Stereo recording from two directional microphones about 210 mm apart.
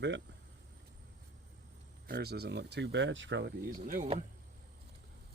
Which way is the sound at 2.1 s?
50° right (ahead or behind).